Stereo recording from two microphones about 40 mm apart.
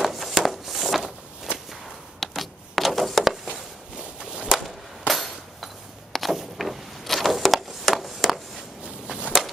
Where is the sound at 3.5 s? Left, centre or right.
Centre.